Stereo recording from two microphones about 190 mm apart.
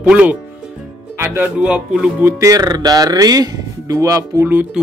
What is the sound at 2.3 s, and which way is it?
Speech, 15° right (ahead or behind).